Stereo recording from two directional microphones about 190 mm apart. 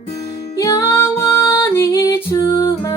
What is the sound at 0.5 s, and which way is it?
Music, 20° left (ahead or behind).